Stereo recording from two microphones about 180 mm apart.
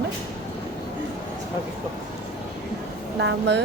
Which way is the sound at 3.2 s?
75° right (ahead or behind).